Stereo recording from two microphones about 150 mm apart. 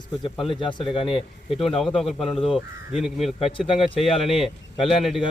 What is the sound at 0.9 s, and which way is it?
Speech, 35° left (ahead or behind).